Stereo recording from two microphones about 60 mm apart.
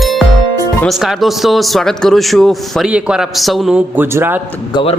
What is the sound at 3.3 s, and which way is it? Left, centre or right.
Speech, centre.